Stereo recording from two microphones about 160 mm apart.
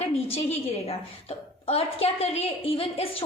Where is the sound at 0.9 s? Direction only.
40° left (ahead or behind).